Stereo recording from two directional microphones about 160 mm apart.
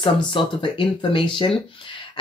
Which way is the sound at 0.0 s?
30° left (ahead or behind).